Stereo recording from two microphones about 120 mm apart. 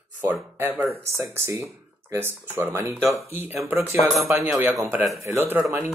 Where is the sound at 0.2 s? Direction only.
20° right (ahead or behind).